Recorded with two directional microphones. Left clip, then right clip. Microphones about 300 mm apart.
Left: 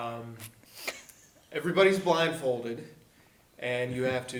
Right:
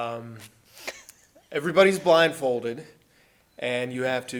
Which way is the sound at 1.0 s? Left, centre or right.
Right.